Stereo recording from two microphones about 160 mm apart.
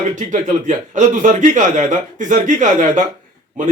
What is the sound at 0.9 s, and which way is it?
A man's voice, 50° right (ahead or behind).